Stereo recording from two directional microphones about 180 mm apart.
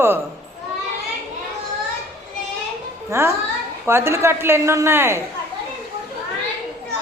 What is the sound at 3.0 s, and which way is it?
Speech, 15° right (ahead or behind).